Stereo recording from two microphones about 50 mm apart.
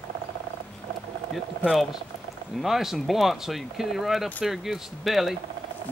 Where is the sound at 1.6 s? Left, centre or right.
Left.